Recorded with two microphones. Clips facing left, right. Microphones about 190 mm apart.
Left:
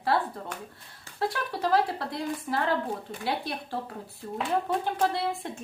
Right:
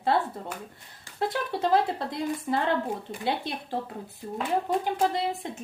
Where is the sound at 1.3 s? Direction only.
25° right (ahead or behind).